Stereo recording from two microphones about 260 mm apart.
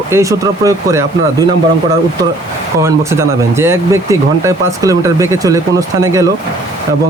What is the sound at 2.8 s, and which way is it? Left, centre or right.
Speech, centre.